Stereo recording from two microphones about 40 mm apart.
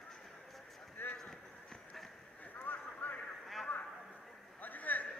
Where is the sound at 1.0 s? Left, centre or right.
Left.